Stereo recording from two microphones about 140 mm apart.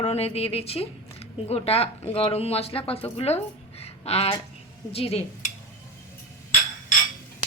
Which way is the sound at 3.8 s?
45° left (ahead or behind).